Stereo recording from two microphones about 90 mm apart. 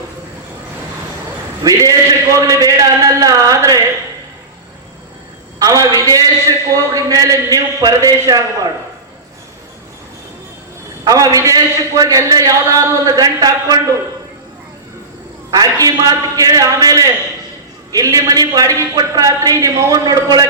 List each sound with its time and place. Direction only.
1.6 s a man's voice: 40° right (ahead or behind)
5.5 s a man's voice: 40° right (ahead or behind)
11.0 s a man's voice: 45° right (ahead or behind)
15.4 s a man's voice: 40° right (ahead or behind)